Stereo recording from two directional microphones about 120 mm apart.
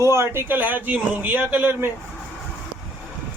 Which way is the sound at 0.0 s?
25° right (ahead or behind).